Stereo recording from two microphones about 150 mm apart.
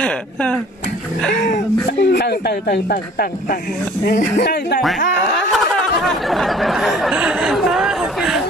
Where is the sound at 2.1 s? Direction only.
90° left.